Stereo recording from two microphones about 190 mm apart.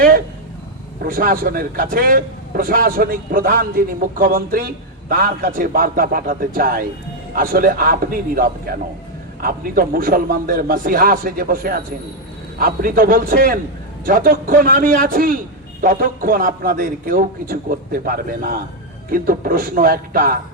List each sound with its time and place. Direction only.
1.0 s speech: 50° right (ahead or behind)
9.4 s speech: 50° right (ahead or behind)